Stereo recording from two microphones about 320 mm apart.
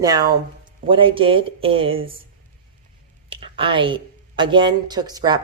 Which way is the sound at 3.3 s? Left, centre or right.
Centre.